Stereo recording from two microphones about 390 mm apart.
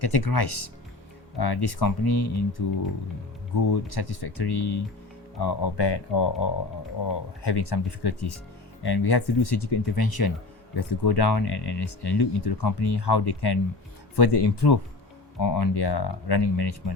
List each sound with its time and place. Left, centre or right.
0.0 s speech: left
3.7 s speech: left
10.8 s speech: left
14.2 s speech: left
15.4 s speech: left